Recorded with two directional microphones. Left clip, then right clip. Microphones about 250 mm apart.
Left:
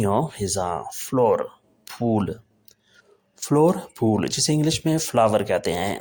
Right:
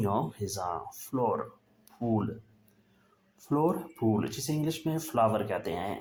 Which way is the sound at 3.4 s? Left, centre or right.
Left.